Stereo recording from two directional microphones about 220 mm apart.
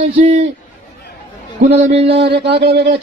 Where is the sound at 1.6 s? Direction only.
30° right (ahead or behind).